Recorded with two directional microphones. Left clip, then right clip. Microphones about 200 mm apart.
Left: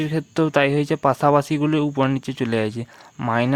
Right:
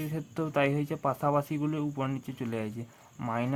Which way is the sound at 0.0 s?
40° left (ahead or behind).